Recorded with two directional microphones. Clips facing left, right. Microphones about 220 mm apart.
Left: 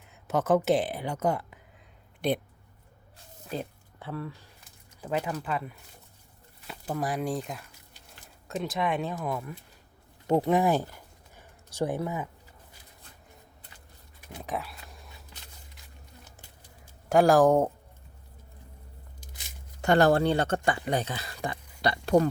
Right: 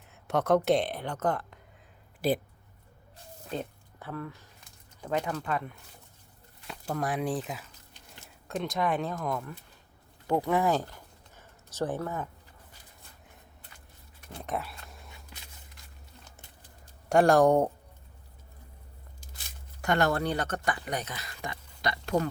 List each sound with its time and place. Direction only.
0.1 s speech: centre (ahead or behind)
2.2 s speech: 5° right (ahead or behind)
3.5 s a sound: 10° left (ahead or behind)
4.9 s speech: 10° left (ahead or behind)
10.2 s speech: 25° left (ahead or behind)
11.3 s a sound: 15° left (ahead or behind)
14.3 s a sound: centre (ahead or behind)
17.1 s speech: centre (ahead or behind)
19.8 s speech: 30° left (ahead or behind)